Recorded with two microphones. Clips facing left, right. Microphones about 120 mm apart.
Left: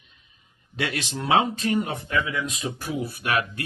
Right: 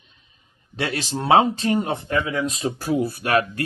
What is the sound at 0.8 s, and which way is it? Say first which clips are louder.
Speech: right 3 dB; 35° right (ahead or behind).